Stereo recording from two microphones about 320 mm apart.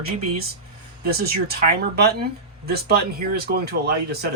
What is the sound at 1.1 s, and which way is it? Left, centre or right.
Speech, right.